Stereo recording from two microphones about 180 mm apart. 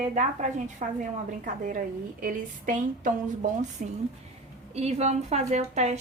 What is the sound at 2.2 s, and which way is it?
A woman's voice, 50° right (ahead or behind).